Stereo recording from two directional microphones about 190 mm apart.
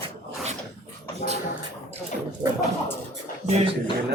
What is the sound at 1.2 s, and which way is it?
Speech, 45° left (ahead or behind).